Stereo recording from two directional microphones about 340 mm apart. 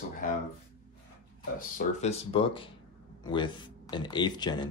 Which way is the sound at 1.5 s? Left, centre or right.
Left.